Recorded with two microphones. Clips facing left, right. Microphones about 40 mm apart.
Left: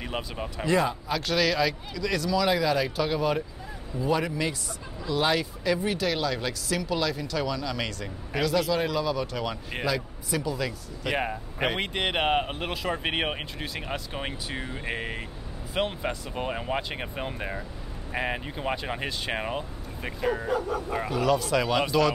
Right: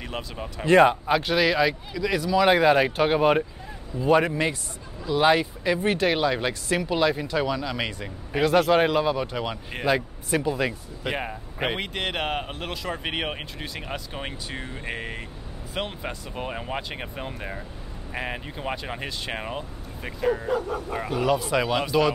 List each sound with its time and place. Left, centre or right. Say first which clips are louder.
0.0 s speech: left 1 dB; centre
0.7 s speech: right 8 dB; right
1.1 s speech: right 4 dB; right
2.3 s speech: right 7 dB; right
5.0 s speech: right 5 dB; centre
5.8 s speech: right 5 dB; right
8.5 s speech: right 7 dB; right
9.8 s speech: right 6 dB; right
11.1 s speech: left 1 dB; centre
11.8 s speech: left 2 dB; centre
21.1 s speech: right 1 dB; centre